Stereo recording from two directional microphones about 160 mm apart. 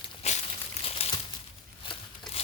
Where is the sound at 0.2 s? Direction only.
45° left (ahead or behind).